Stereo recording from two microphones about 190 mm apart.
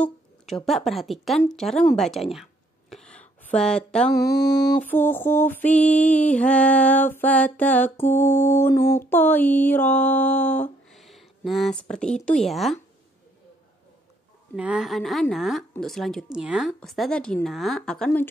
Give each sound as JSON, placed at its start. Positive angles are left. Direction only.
{"t": 0.7, "sound": "a woman's voice", "side_deg": 0}
{"t": 2.3, "sound": "a sound", "side_deg": 0}
{"t": 4.1, "sound": "mantra", "side_deg": 15}
{"t": 12.3, "sound": "a woman's voice", "side_deg": 0}
{"t": 14.5, "sound": "a woman's voice", "side_deg": -5}